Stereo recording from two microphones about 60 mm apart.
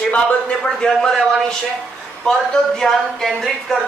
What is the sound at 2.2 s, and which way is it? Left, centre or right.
Speech, centre.